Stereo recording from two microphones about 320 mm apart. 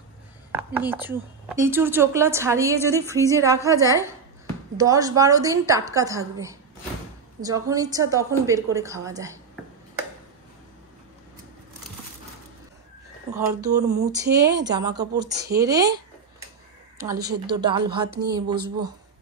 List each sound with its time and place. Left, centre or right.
0.5 s a woman's voice: centre
13.3 s a woman's voice: centre
13.9 s a sound: right
14.7 s a woman's voice: centre
17.2 s a sound: right
17.6 s a woman's voice: centre
17.8 s speech: right